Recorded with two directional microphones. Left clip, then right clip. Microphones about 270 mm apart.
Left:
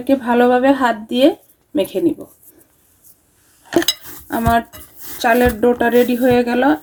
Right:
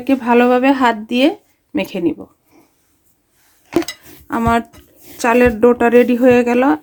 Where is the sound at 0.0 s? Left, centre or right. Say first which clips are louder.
Right 1 dB; right.